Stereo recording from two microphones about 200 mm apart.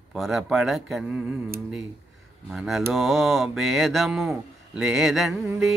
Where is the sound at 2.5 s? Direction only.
Centre (ahead or behind).